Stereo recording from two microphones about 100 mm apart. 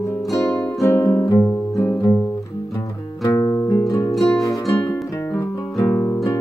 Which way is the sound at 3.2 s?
30° left (ahead or behind).